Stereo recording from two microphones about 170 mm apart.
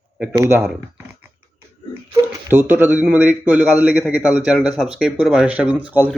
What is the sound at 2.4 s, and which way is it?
Speech, 10° right (ahead or behind).